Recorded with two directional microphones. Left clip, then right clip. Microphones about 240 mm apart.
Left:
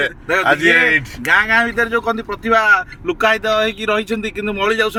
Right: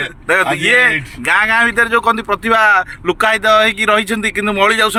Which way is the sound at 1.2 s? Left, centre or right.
Right.